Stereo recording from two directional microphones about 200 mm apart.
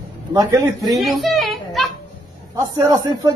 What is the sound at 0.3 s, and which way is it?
Speech, 15° right (ahead or behind).